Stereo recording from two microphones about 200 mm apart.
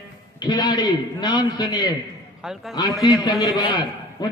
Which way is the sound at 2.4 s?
Centre (ahead or behind).